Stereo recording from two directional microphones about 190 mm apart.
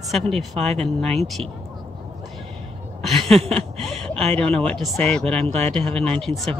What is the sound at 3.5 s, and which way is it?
Speech, 5° left (ahead or behind).